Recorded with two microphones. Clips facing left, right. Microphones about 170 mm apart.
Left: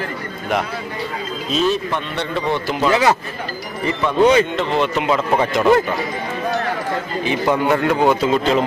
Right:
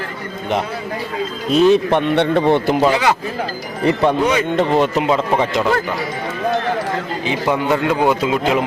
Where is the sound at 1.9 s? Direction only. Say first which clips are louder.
Right 9 dB; 60° right (ahead or behind).